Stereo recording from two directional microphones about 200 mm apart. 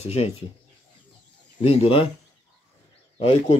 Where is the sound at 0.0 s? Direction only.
30° left (ahead or behind).